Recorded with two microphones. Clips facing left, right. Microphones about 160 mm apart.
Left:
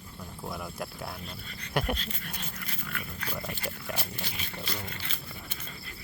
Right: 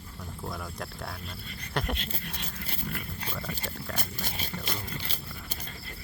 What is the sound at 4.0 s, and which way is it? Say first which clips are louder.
Dog: right 1 dB; 45° right (ahead or behind).